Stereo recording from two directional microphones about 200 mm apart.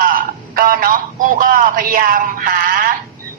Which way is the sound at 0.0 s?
45° right (ahead or behind).